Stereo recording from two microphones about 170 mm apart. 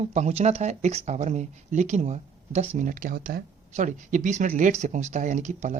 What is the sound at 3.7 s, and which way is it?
Speech, 45° right (ahead or behind).